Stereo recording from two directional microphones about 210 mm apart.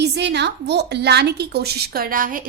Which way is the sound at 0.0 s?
55° right (ahead or behind).